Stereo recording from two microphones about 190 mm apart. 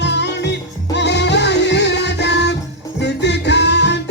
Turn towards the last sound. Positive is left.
turn(degrees=65)  # may be behind; listen again after turning